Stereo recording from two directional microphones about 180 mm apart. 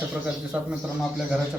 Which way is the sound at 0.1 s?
5° right (ahead or behind).